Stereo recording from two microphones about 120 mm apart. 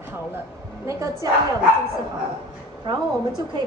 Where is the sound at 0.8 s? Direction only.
25° right (ahead or behind).